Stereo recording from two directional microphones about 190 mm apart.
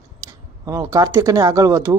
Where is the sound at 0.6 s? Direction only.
20° right (ahead or behind).